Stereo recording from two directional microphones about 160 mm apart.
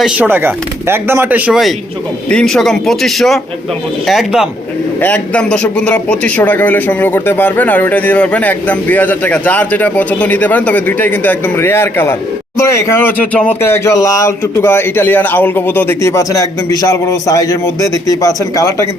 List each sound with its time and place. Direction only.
0.0 s a man's voice: 10° right (ahead or behind)
4.9 s a man's voice: 10° left (ahead or behind)